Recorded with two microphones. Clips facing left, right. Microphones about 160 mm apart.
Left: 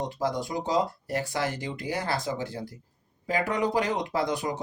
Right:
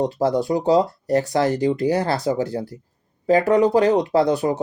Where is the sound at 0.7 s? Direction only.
35° right (ahead or behind).